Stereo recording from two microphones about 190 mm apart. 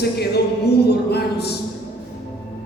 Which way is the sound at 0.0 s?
60° left (ahead or behind).